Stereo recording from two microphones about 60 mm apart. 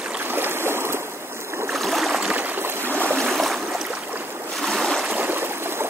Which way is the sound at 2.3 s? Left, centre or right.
Right.